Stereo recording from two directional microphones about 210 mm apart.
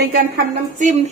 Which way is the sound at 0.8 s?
35° right (ahead or behind).